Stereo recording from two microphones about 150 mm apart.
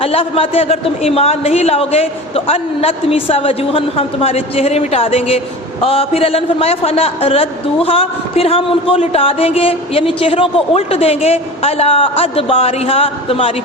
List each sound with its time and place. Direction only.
0.0 s a man's voice: 40° left (ahead or behind)